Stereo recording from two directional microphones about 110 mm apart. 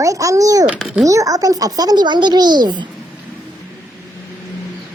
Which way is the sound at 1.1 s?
30° right (ahead or behind).